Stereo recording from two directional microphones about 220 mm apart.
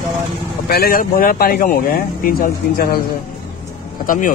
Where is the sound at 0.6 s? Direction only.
45° left (ahead or behind).